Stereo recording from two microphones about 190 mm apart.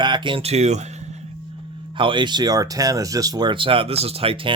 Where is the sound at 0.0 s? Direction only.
25° right (ahead or behind).